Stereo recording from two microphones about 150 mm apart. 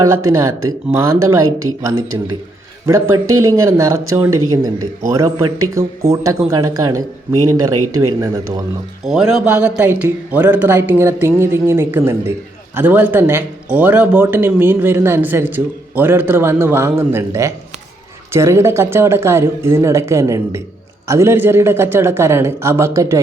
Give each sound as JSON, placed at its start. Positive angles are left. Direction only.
{"t": 0.0, "sound": "speech", "side_deg": -20}
{"t": 2.8, "sound": "speech", "side_deg": -20}
{"t": 9.0, "sound": "speech", "side_deg": -5}